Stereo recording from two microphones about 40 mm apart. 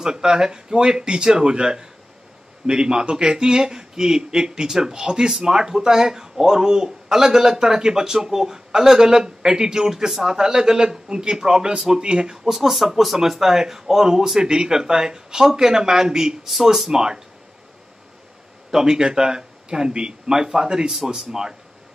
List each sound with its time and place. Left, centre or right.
0.0 s speech: centre
12.4 s speech: centre
16.4 s speech: centre
18.7 s speech: centre